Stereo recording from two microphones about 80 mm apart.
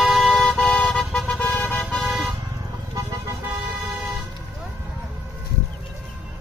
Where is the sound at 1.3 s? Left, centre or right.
Centre.